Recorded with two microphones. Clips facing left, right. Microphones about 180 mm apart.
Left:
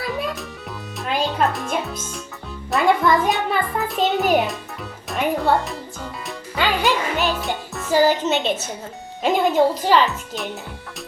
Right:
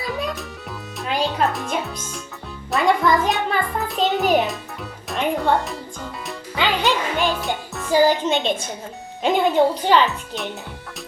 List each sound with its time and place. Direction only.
0.0 s music: 5° left (ahead or behind)
0.9 s a child's voice: centre (ahead or behind)
5.0 s music: 5° left (ahead or behind)
6.6 s speech: 10° left (ahead or behind)
7.3 s music: 5° left (ahead or behind)
8.3 s a woman's voice: 5° left (ahead or behind)